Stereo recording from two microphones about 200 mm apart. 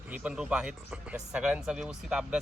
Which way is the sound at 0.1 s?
5° right (ahead or behind).